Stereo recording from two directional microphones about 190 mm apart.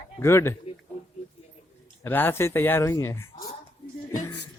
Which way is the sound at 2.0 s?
10° left (ahead or behind).